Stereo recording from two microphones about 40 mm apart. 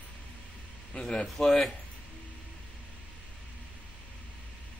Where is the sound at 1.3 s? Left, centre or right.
Centre.